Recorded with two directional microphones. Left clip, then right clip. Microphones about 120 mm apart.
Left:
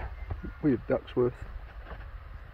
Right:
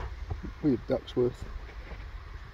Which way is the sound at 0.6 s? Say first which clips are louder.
Left 1 dB; 55° right (ahead or behind).